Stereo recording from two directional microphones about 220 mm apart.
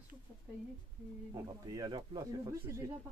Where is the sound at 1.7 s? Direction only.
15° right (ahead or behind).